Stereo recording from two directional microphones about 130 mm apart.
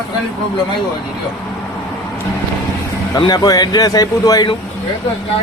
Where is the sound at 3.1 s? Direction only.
30° left (ahead or behind).